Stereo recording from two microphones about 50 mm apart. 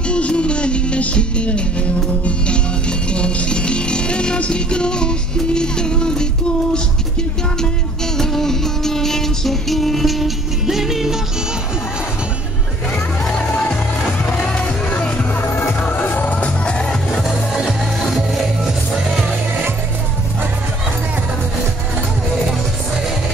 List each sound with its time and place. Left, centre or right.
0.1 s music: left
8.2 s music: centre
15.0 s music: left
15.8 s music: left
16.3 s music: centre
17.1 s music: centre